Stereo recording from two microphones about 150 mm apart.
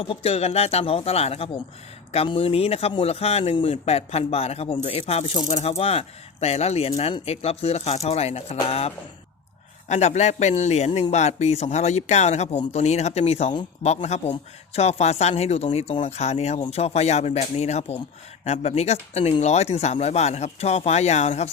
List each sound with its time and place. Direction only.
0.1 s speech: 40° left (ahead or behind)
9.9 s speech: 50° left (ahead or behind)